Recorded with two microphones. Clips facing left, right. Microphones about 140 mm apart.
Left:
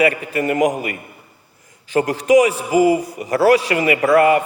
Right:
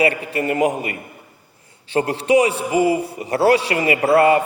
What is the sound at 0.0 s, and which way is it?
A man's voice, 30° right (ahead or behind).